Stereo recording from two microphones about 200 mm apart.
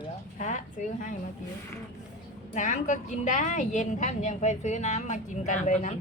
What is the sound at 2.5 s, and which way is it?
A woman's voice, 40° left (ahead or behind).